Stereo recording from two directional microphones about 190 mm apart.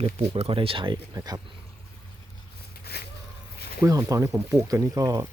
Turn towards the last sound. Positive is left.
turn(degrees=-20)  # may be behind; listen again after turning